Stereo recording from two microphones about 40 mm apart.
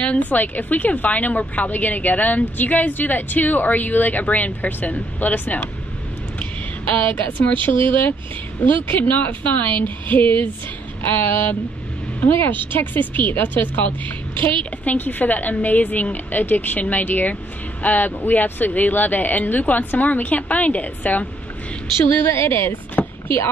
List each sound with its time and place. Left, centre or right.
0.2 s a woman's voice: left
6.9 s speech: left
11.1 s speech: left
14.5 s a woman's voice: left
15.0 s speech: left
22.2 s a woman's voice: left
23.2 s speech: left